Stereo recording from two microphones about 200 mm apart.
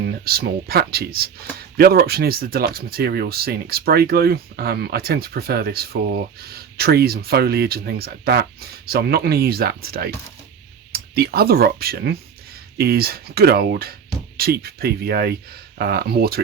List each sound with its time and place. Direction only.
0.0 s speech: 50° right (ahead or behind)